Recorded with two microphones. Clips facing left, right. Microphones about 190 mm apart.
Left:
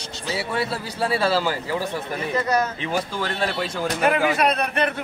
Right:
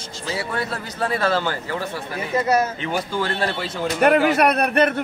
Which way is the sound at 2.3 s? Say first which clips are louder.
Right 3 dB; 25° right (ahead or behind).